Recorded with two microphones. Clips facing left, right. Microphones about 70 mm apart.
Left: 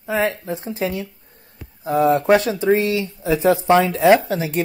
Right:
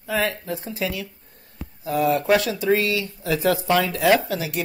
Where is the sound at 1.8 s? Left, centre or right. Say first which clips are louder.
Left 4 dB; left.